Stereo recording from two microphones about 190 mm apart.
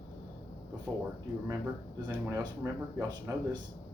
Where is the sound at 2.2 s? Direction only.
15° right (ahead or behind).